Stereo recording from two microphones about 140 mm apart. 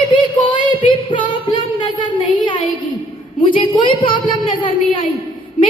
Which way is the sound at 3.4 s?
35° left (ahead or behind).